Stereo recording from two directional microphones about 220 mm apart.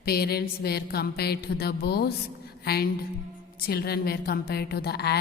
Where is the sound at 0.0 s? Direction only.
45° left (ahead or behind).